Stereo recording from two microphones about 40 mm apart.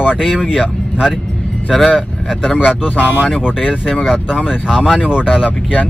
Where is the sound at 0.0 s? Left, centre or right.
Right.